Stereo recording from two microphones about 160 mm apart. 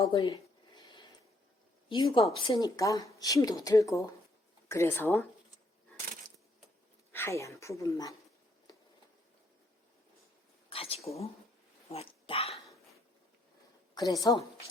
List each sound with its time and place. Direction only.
0.0 s a sound: 25° left (ahead or behind)
1.9 s speech: 30° left (ahead or behind)
7.1 s speech: 15° left (ahead or behind)
10.7 s speech: 35° left (ahead or behind)
13.9 s a woman's voice: 25° left (ahead or behind)